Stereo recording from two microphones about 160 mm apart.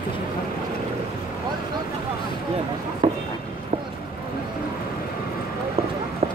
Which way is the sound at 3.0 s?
30° right (ahead or behind).